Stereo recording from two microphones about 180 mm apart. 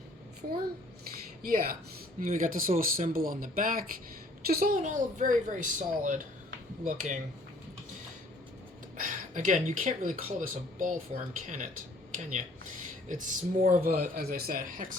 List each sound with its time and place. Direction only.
1.1 s a sound: 55° right (ahead or behind)
2.2 s speech: 50° right (ahead or behind)
9.0 s speech: 45° right (ahead or behind)
13.1 s speech: 45° right (ahead or behind)